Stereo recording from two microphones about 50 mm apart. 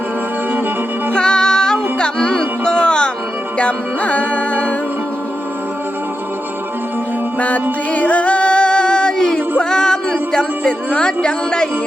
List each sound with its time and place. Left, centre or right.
1.1 s music: centre
7.3 s music: left